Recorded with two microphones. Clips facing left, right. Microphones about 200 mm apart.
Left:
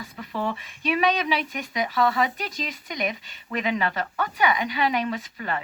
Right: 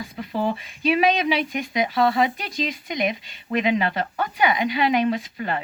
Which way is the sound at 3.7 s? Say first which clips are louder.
Right 2 dB; 25° right (ahead or behind).